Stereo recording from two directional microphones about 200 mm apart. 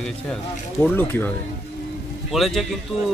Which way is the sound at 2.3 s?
Centre (ahead or behind).